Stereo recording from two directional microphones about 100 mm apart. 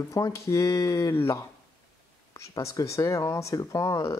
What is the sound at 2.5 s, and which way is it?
Speech, 35° left (ahead or behind).